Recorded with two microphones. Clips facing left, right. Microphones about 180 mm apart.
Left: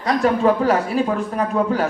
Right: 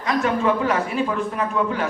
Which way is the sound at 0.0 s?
35° left (ahead or behind).